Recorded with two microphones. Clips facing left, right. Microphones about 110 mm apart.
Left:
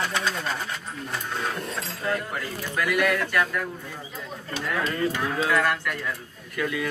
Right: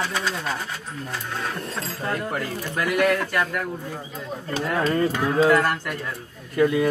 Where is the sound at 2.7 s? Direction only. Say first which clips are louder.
Right 3 dB; 35° right (ahead or behind).